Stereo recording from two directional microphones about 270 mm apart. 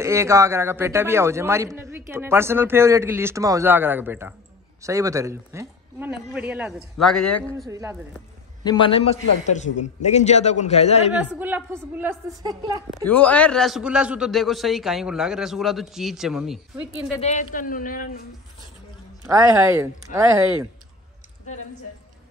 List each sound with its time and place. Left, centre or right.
0.0 s a man's voice: centre
7.5 s a man's voice: centre
8.6 s a man's voice: centre
11.1 s a man's voice: centre
13.0 s a man's voice: centre
17.2 s speech: left
19.2 s a man's voice: centre